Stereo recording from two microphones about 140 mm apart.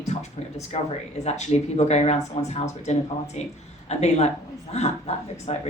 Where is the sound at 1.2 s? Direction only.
50° left (ahead or behind).